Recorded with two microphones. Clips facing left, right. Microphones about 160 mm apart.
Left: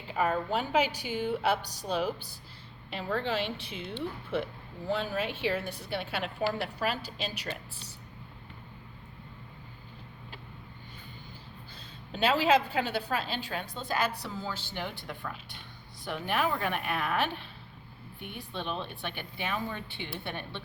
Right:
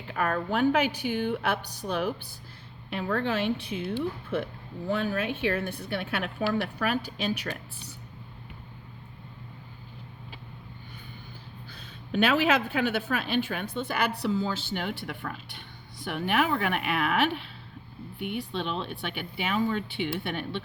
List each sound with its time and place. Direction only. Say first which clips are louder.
0.1 s a woman's voice: right 1 dB; 60° right (ahead or behind)
3.8 s speech: right 8 dB; 10° right (ahead or behind)
4.9 s a woman's voice: right 3 dB; 50° right (ahead or behind)
11.7 s a woman's voice: right 11 dB; 70° right (ahead or behind)